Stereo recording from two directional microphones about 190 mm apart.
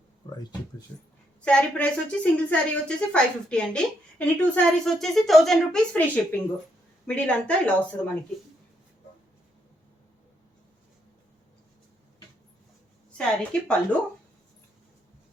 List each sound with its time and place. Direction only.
0.2 s a sound: 20° left (ahead or behind)
0.9 s a woman's voice: 15° left (ahead or behind)
1.4 s a woman's voice: 5° left (ahead or behind)
13.1 s a woman's voice: 5° left (ahead or behind)